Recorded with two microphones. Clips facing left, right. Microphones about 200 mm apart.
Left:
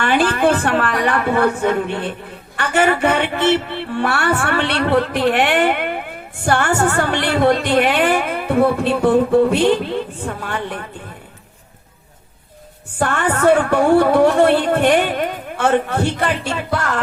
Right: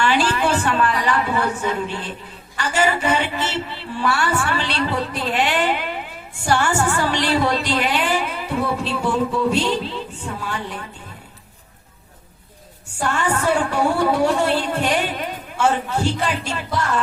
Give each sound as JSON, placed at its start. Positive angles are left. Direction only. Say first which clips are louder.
{"t": 0.0, "sound": "a sound", "louder": "left 4 dB", "side_deg": 55}
{"t": 2.6, "sound": "music", "louder": "left 4 dB", "side_deg": 60}
{"t": 13.0, "sound": "music", "louder": "left 4 dB", "side_deg": 55}